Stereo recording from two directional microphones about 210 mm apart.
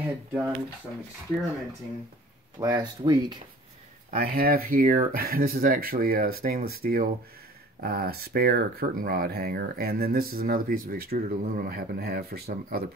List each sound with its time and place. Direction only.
0.0 s speech: 10° right (ahead or behind)
2.6 s speech: 20° right (ahead or behind)
4.1 s speech: 45° right (ahead or behind)